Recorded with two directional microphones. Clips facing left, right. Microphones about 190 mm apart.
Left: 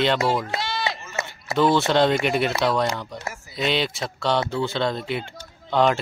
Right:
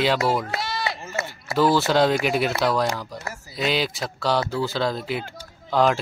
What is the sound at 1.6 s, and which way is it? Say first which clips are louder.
Speech: even; 5° right (ahead or behind).